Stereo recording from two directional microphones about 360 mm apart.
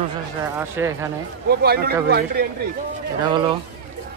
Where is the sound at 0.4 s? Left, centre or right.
Centre.